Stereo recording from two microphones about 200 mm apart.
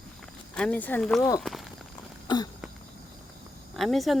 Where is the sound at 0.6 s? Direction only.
5° left (ahead or behind).